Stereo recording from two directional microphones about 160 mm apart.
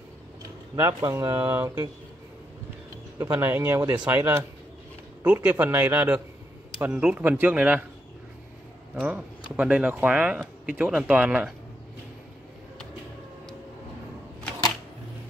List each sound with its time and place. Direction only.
0.7 s speech: 15° right (ahead or behind)
3.2 s speech: 15° right (ahead or behind)
9.0 s speech: 10° right (ahead or behind)